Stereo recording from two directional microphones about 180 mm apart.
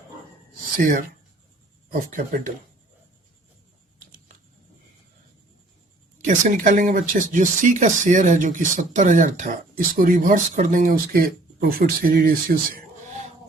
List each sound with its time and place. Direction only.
0.8 s speech: 50° right (ahead or behind)
6.2 s speech: 45° right (ahead or behind)